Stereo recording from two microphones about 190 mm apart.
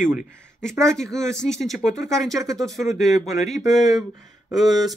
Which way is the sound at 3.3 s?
35° left (ahead or behind).